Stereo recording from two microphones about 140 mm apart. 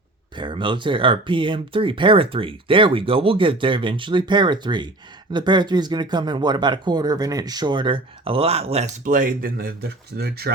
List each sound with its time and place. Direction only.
0.3 s speech: 35° right (ahead or behind)
9.0 s speech: 75° right (ahead or behind); by 10.3 s 90° right